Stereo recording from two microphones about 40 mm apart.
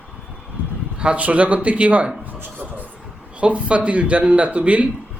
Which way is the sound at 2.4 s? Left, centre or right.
Right.